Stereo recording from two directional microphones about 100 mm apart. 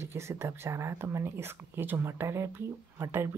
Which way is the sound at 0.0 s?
25° right (ahead or behind).